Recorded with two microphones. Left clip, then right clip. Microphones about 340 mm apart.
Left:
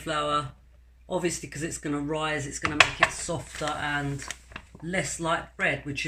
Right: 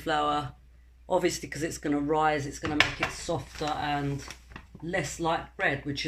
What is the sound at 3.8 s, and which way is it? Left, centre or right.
Speech, centre.